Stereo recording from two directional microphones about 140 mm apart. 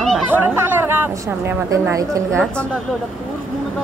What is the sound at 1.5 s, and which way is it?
Speech, 20° right (ahead or behind).